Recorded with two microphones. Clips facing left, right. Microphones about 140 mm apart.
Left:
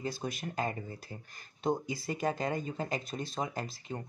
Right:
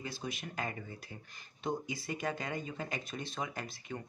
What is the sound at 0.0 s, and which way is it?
Speech, 45° left (ahead or behind).